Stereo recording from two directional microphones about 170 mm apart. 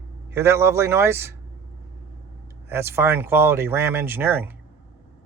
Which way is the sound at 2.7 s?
15° right (ahead or behind).